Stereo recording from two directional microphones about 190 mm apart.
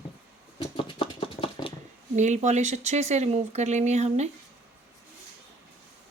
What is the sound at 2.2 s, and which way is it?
Speech, 40° right (ahead or behind).